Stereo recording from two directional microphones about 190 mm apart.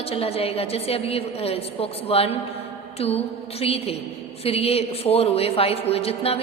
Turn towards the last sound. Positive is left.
turn(degrees=30)  # may be behind; listen again after turning